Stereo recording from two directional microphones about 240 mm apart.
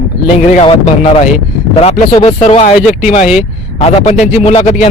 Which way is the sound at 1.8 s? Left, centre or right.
Left.